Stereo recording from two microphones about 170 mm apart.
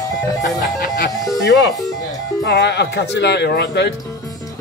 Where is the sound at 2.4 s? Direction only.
90° left.